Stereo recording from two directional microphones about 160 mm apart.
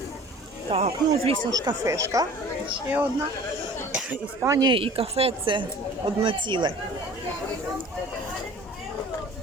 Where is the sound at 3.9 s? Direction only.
5° right (ahead or behind).